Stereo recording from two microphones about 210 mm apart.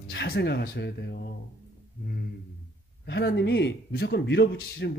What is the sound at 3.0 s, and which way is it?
A man's voice, 55° left (ahead or behind).